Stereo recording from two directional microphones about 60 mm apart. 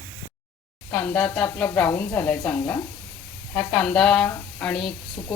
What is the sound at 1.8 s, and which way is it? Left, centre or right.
A woman's voice, left.